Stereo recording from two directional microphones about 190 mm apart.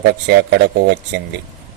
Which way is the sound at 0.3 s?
60° right (ahead or behind).